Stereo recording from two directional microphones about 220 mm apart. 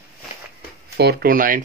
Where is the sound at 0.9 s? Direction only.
45° right (ahead or behind).